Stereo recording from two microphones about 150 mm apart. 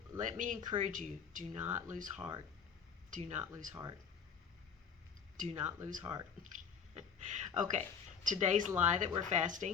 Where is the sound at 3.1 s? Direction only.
50° right (ahead or behind).